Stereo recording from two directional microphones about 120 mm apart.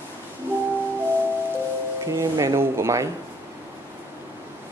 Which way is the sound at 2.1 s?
25° right (ahead or behind).